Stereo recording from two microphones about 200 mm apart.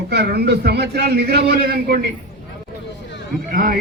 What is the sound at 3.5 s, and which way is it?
Speech, 45° right (ahead or behind).